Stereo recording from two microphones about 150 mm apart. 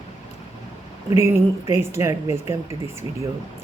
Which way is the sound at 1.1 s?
20° right (ahead or behind).